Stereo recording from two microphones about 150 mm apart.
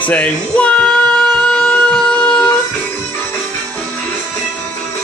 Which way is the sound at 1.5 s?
5° left (ahead or behind).